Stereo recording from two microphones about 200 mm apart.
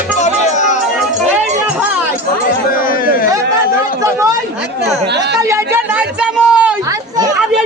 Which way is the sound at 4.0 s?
15° right (ahead or behind).